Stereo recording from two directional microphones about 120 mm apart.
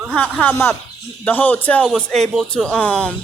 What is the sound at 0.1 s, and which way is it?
A man's voice, 15° left (ahead or behind).